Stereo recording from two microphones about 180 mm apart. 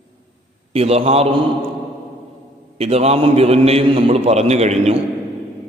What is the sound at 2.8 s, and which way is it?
Mantra, 35° right (ahead or behind).